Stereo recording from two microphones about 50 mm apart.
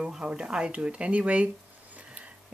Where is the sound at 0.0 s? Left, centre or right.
Centre.